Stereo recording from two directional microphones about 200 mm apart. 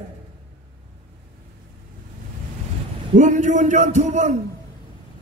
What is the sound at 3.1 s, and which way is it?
A man's voice, 35° right (ahead or behind).